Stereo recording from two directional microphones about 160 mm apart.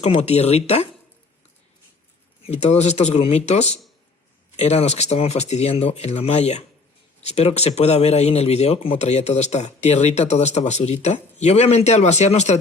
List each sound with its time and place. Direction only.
0.0 s speech: 40° left (ahead or behind)
2.5 s speech: 40° left (ahead or behind)